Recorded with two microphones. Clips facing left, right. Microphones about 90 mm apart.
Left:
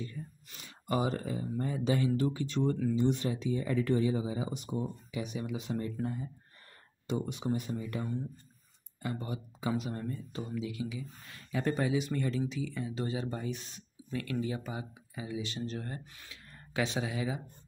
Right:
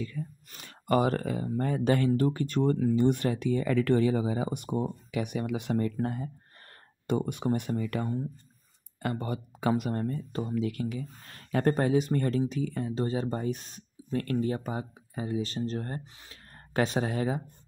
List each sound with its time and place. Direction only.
0.5 s speech: 55° right (ahead or behind)
7.1 s speech: 55° right (ahead or behind)